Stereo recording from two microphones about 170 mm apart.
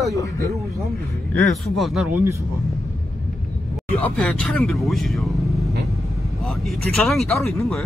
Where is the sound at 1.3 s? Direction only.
Centre (ahead or behind).